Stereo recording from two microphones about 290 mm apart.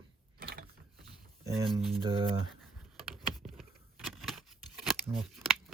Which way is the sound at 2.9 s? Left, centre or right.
Centre.